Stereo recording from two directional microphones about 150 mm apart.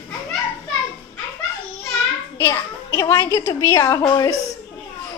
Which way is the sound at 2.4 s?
15° left (ahead or behind).